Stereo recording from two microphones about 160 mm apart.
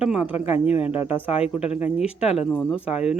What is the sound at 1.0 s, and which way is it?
Speech, 35° left (ahead or behind).